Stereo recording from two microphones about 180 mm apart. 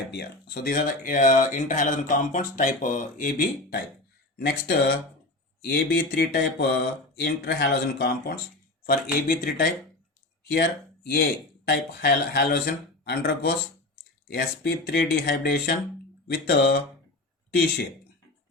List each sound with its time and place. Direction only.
0.1 s speech: 60° left (ahead or behind)
8.8 s speech: 50° left (ahead or behind)